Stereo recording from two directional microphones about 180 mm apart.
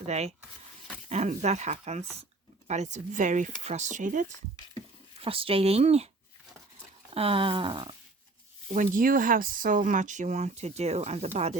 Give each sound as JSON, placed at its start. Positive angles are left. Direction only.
{"t": 0.0, "sound": "speech", "side_deg": -35}
{"t": 5.2, "sound": "speech", "side_deg": -30}
{"t": 7.1, "sound": "a sound", "side_deg": -30}
{"t": 8.7, "sound": "speech", "side_deg": -45}